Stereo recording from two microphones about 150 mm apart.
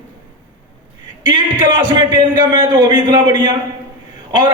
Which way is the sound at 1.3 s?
30° right (ahead or behind).